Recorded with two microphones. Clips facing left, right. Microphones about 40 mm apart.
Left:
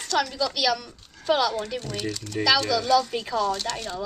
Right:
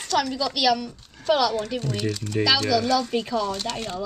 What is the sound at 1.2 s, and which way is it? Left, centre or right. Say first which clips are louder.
Speech: right 2 dB; centre.